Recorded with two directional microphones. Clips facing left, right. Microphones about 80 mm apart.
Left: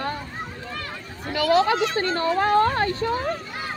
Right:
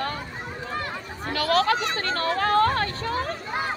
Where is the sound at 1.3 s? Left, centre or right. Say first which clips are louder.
Left 3 dB; centre.